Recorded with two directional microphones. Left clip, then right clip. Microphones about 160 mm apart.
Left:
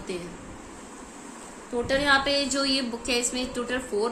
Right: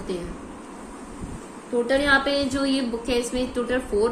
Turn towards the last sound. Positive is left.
turn(degrees=15)  # may be behind; listen again after turning